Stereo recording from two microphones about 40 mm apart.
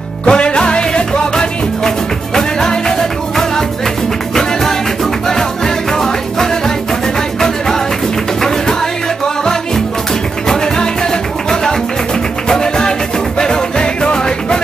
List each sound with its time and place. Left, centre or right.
0.2 s music: left
5.9 s music: centre
12.4 s music: centre